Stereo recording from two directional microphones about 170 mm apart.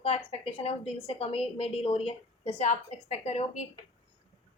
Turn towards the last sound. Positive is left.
turn(degrees=40)  # may be behind; listen again after turning